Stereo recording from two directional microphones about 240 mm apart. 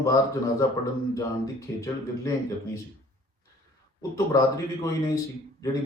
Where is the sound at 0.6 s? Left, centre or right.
Centre.